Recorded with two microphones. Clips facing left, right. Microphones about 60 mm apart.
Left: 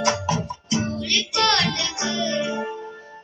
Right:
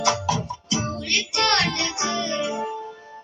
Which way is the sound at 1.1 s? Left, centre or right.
Right.